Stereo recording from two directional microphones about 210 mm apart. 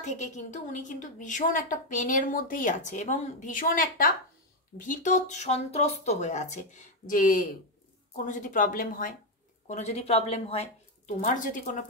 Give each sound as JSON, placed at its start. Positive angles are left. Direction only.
{"t": 0.0, "sound": "a woman's voice", "side_deg": 35}